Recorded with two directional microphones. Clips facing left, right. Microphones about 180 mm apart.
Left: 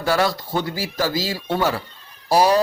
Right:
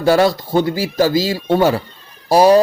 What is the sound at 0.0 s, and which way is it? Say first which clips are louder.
Speech: right 7 dB; 25° right (ahead or behind).